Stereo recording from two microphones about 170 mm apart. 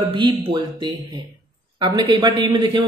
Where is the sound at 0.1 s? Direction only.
30° right (ahead or behind).